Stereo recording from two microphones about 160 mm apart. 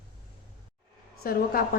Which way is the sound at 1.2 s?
65° left (ahead or behind).